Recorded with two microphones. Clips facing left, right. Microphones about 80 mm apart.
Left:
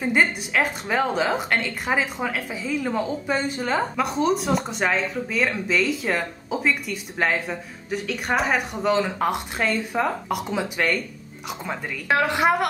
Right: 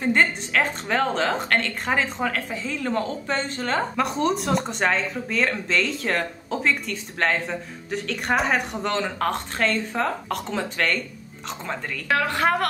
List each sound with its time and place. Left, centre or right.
0.0 s a woman's voice: centre
12.1 s a woman's voice: centre